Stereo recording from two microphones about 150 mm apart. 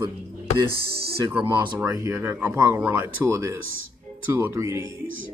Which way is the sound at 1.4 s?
25° right (ahead or behind).